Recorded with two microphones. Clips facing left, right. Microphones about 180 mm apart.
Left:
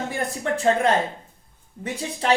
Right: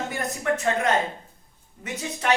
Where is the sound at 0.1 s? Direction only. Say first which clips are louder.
Left 1 dB; 30° left (ahead or behind).